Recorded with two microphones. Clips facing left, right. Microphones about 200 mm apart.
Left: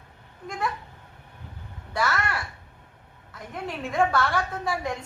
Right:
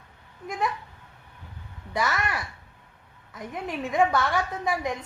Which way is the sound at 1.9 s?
20° right (ahead or behind).